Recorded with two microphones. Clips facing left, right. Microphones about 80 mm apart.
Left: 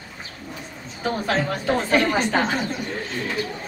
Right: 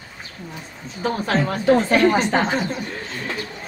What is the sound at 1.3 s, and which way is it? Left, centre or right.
Speech, right.